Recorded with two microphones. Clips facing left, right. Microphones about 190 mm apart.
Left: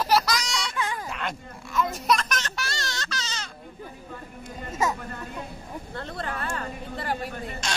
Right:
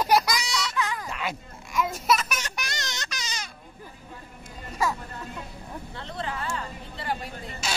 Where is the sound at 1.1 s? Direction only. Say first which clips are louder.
Even; 5° right (ahead or behind).